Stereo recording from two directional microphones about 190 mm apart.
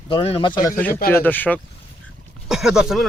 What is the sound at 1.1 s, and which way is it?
Speech, 10° left (ahead or behind).